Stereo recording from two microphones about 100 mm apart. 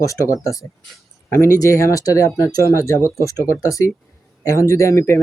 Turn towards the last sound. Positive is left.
turn(degrees=30)  # may be behind; listen again after turning